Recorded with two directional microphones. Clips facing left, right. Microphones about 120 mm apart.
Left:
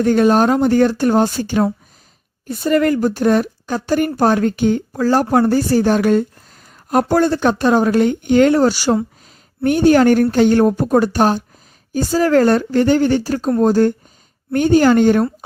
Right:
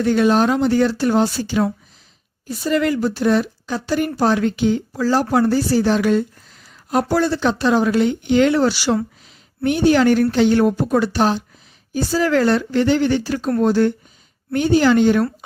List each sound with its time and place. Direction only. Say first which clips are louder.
0.0 s speech: left 3 dB; 45° left (ahead or behind)